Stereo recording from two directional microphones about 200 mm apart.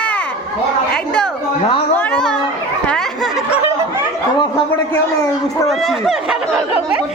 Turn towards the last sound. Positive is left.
turn(degrees=0)  # may be behind; listen again after turning